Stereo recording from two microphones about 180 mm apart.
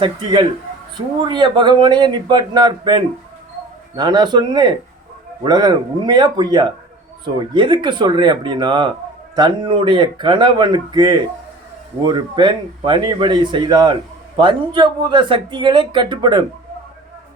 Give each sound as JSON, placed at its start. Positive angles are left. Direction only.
{"t": 0.0, "sound": "speech", "side_deg": -25}